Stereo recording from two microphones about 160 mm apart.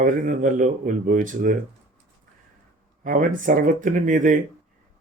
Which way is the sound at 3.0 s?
55° right (ahead or behind).